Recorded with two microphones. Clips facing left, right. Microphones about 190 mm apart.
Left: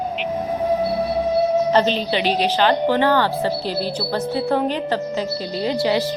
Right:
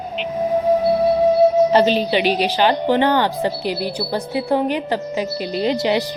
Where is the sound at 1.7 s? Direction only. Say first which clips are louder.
Right 3 dB; 10° right (ahead or behind).